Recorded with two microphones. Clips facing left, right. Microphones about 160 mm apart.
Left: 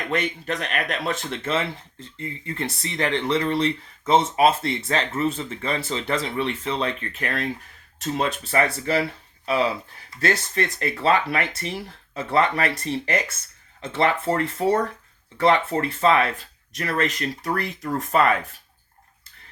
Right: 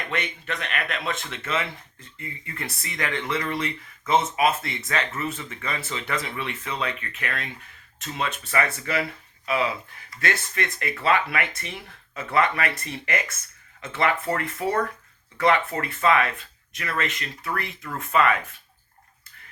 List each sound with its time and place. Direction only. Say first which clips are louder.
0.1 s speech: left 7 dB; 40° left (ahead or behind)